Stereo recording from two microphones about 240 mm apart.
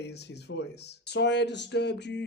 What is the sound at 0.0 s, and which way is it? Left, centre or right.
Speech, left.